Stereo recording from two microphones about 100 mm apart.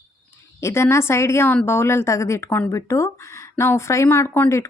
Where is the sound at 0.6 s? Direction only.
25° left (ahead or behind).